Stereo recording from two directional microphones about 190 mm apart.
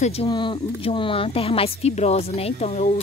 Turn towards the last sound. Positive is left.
turn(degrees=35)  # may be behind; listen again after turning